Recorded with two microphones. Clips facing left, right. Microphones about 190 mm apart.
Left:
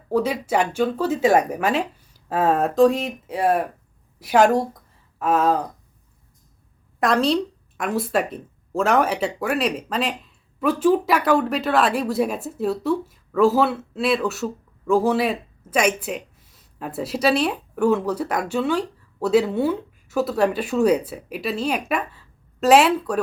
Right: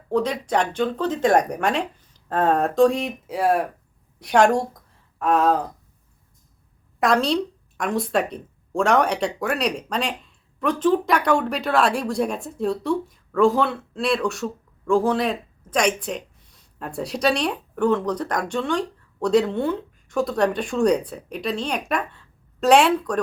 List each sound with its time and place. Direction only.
0.1 s speech: 5° left (ahead or behind)
7.0 s speech: centre (ahead or behind)